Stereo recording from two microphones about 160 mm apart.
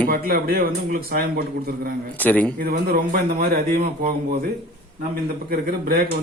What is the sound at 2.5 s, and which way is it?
A man's voice, 70° right (ahead or behind).